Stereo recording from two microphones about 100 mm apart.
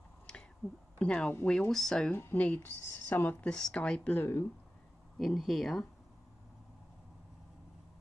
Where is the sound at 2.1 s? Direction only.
20° left (ahead or behind); by 5.8 s 5° left (ahead or behind).